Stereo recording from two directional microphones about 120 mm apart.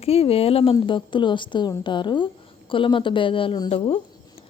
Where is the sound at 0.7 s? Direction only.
40° left (ahead or behind).